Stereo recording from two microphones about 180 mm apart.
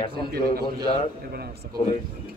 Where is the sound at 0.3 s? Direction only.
60° right (ahead or behind).